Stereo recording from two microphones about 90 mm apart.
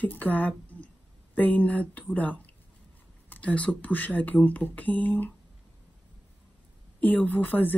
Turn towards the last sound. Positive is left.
turn(degrees=20)  # may be behind; listen again after turning